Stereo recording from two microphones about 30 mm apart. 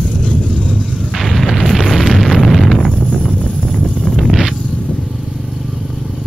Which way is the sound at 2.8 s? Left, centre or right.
Left.